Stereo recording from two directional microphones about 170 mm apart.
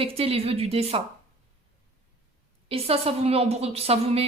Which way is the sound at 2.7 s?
35° right (ahead or behind).